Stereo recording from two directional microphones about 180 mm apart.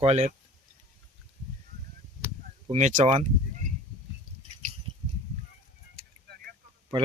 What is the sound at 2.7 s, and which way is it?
Speech, 40° right (ahead or behind).